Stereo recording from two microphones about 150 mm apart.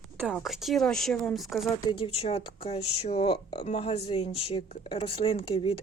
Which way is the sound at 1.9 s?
40° left (ahead or behind).